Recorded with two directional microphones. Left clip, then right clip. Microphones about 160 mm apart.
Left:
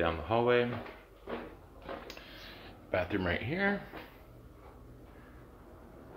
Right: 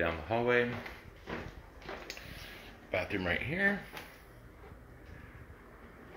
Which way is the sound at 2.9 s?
20° left (ahead or behind).